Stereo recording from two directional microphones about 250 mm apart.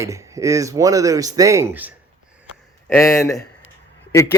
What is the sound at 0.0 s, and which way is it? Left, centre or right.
Speech, centre.